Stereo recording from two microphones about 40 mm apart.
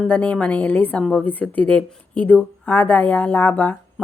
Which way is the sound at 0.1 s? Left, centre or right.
Left.